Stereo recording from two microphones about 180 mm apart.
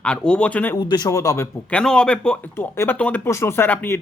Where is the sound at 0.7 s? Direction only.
25° left (ahead or behind).